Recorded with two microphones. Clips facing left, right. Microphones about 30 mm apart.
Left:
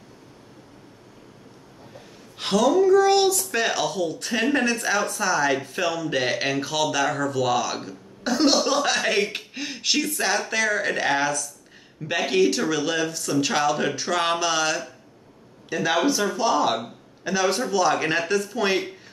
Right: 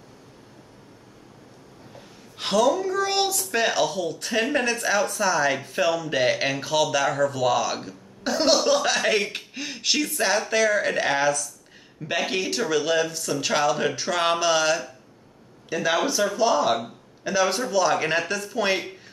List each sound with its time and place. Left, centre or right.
2.3 s speech: centre